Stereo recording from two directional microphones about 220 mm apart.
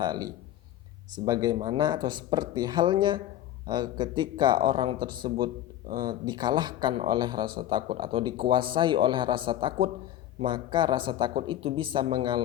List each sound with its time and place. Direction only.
0.0 s speech: 20° right (ahead or behind)